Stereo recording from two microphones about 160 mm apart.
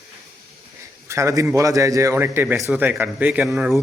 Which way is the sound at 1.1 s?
20° right (ahead or behind).